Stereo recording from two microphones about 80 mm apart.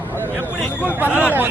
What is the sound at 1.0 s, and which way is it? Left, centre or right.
Speech, centre.